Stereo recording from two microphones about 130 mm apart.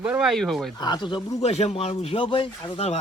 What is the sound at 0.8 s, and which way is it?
Speech, 35° left (ahead or behind).